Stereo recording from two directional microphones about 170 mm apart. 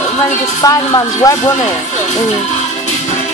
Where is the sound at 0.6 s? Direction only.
20° left (ahead or behind).